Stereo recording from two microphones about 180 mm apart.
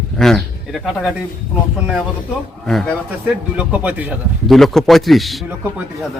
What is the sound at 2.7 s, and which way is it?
Speech, centre (ahead or behind).